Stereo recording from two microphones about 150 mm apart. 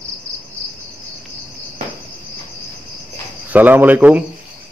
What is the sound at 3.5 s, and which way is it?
Cricket, 10° right (ahead or behind).